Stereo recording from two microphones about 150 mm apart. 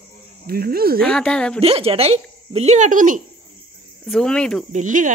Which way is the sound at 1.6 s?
40° right (ahead or behind).